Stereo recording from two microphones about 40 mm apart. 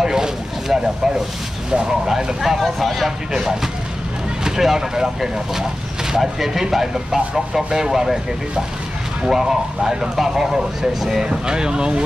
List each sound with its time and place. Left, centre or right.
0.0 s a sound: centre
1.9 s speech: centre
4.5 s speech: centre